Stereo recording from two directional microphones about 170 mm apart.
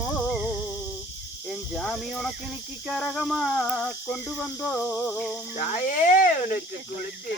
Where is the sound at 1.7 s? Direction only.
5° left (ahead or behind).